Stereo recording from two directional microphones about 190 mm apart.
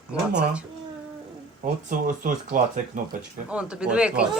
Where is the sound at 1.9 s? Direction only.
45° right (ahead or behind).